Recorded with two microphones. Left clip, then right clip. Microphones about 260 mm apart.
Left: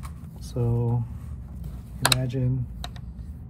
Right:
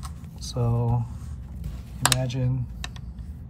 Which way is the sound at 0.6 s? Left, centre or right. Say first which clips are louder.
Even; left.